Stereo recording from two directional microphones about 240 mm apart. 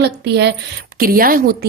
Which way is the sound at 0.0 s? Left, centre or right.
Right.